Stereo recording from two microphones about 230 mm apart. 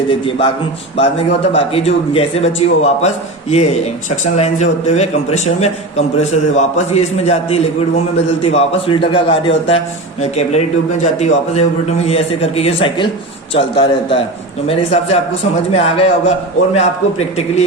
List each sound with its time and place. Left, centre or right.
0.1 s a man's voice: left
4.1 s a man's voice: left